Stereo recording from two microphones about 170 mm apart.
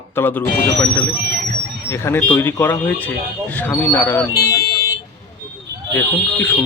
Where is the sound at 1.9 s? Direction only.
15° left (ahead or behind).